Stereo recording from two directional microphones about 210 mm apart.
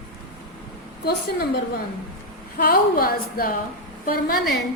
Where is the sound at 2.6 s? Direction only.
45° left (ahead or behind).